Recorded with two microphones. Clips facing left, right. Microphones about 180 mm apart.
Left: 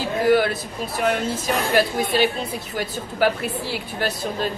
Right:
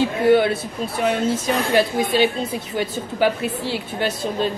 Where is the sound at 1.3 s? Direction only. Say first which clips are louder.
Right 2 dB; 20° right (ahead or behind).